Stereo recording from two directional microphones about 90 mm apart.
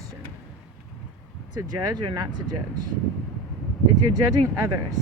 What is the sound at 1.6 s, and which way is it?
Speech, 45° right (ahead or behind).